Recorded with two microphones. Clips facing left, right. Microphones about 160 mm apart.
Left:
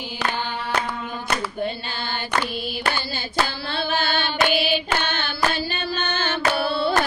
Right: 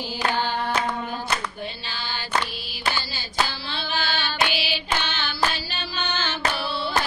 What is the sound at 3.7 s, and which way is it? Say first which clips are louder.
Female singing: left 5 dB; 55° left (ahead or behind).